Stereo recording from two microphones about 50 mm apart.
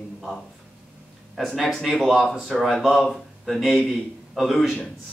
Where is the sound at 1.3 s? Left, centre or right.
Centre.